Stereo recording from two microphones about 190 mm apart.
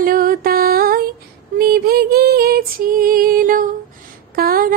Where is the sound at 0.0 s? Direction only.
50° right (ahead or behind).